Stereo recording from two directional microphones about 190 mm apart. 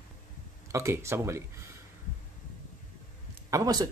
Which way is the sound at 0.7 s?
15° right (ahead or behind).